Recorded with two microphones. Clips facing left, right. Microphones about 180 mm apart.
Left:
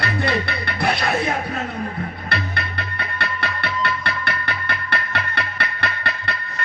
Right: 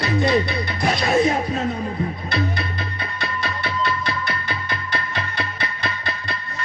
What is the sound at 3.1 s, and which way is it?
Music, 65° left (ahead or behind).